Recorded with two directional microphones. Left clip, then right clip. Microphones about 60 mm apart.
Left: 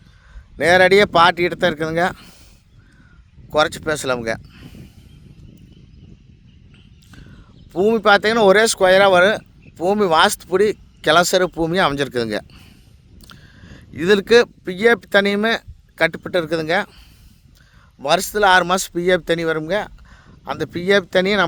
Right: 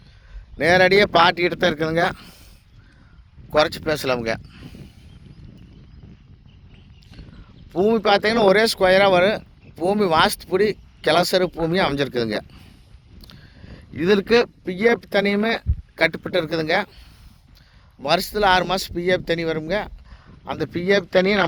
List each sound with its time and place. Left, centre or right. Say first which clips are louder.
0.5 s speech: left 3 dB; left
1.7 s speech: left 1 dB; centre
3.5 s speech: left 1 dB; left
4.7 s a sound: even; left
7.3 s a sound: left 1 dB; centre
8.0 s speech: left 5 dB; left
13.2 s biting: left 3 dB; left
14.9 s speech: left 4 dB; left
16.0 s a man's voice: left 2 dB; left
18.0 s a man's voice: left 3 dB; left
18.6 s speech: left 4 dB; left
20.4 s speech: left 2 dB; left